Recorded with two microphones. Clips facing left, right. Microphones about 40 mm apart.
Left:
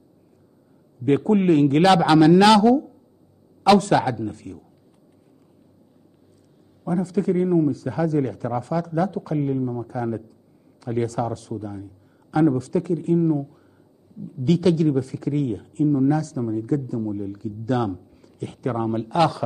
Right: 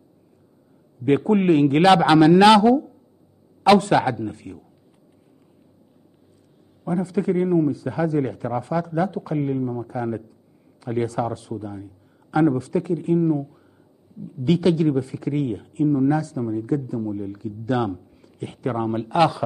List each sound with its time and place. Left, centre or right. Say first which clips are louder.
1.1 s speech: even; centre
6.8 s speech: even; centre